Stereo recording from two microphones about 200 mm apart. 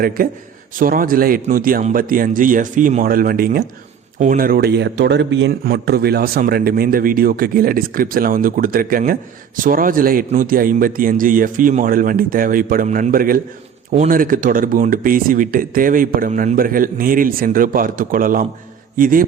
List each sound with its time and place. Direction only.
0.0 s a man's voice: 45° right (ahead or behind)